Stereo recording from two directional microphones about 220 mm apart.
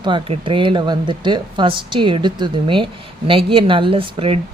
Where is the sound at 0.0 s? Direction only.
20° right (ahead or behind).